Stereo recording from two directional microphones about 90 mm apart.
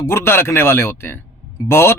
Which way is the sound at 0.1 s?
30° left (ahead or behind).